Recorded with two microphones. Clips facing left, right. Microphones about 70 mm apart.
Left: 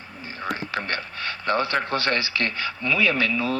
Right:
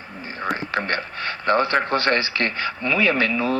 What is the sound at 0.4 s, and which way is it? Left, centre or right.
Speech, right.